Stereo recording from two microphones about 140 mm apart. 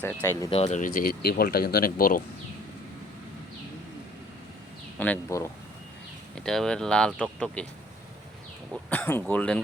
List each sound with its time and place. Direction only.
0.0 s speech: 20° left (ahead or behind)
0.5 s speech: 50° left (ahead or behind); by 2.2 s 90° left
4.9 s speech: 10° left (ahead or behind)
6.3 s speech: 5° left (ahead or behind)
8.7 s speech: 15° left (ahead or behind)